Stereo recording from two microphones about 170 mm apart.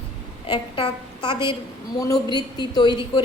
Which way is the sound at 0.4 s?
30° left (ahead or behind).